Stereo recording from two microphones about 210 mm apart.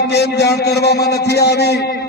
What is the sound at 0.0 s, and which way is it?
A man's voice, 50° left (ahead or behind).